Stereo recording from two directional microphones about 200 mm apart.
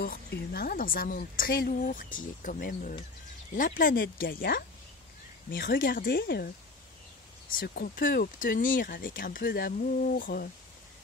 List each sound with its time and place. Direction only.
0.0 s speech: 50° left (ahead or behind)